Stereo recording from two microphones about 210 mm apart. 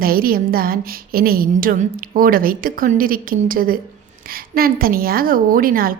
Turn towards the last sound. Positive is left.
turn(degrees=-45)  # may be behind; listen again after turning